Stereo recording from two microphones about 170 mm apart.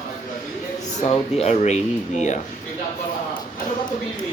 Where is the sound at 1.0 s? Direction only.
35° left (ahead or behind).